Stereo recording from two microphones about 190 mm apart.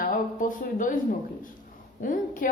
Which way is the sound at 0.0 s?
45° left (ahead or behind).